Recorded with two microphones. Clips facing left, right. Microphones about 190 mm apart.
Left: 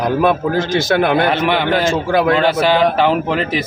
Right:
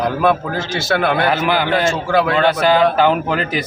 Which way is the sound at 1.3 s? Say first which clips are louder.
Left 1 dB; centre (ahead or behind).